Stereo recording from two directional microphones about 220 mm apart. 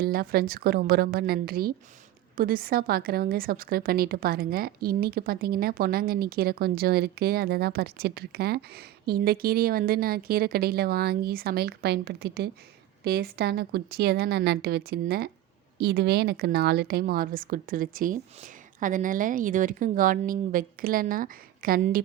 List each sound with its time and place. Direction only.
0.0 s a woman's voice: 45° right (ahead or behind)